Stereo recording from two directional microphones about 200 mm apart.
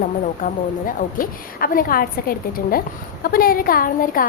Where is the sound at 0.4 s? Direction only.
45° left (ahead or behind).